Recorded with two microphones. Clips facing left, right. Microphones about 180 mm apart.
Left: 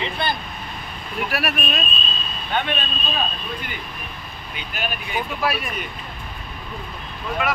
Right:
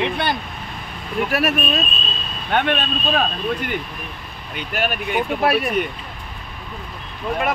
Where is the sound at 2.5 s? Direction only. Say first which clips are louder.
Right 5 dB; 65° right (ahead or behind).